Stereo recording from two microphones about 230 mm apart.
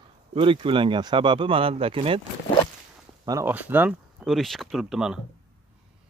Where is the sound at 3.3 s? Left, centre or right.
Centre.